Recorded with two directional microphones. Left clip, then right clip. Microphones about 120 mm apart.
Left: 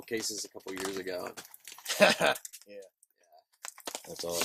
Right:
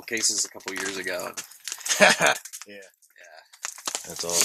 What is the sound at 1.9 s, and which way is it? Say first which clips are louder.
Speech: right 6 dB; 40° right (ahead or behind).